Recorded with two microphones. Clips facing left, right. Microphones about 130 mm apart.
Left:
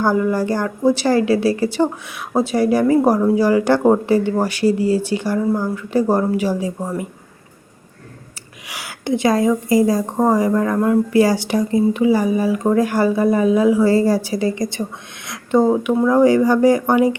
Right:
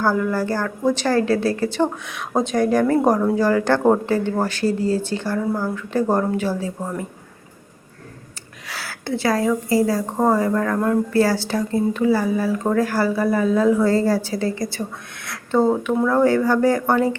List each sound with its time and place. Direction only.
0.0 s speech: 15° left (ahead or behind)
8.6 s a woman's voice: 15° left (ahead or behind)